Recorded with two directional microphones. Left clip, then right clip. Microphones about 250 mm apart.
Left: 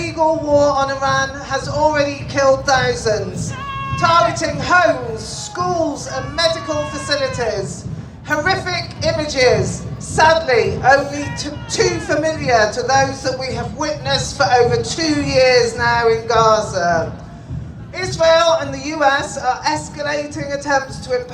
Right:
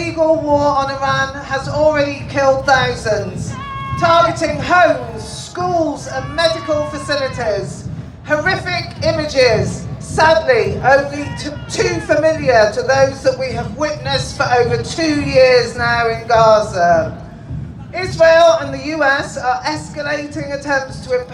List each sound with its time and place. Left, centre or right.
0.2 s speech: centre